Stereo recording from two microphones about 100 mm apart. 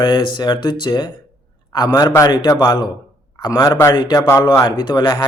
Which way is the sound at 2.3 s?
45° left (ahead or behind).